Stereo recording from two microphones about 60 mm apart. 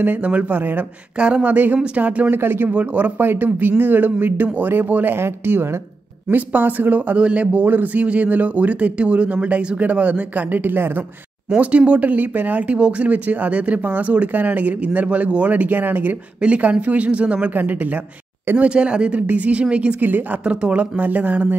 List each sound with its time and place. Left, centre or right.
0.0 s speech: right
1.1 s a sound: centre
1.5 s speech: right
2.3 s speech: right
2.7 s speech: right
6.2 s speech: right
11.5 s speech: right
16.3 s speech: right
18.6 s speech: centre
20.4 s speech: centre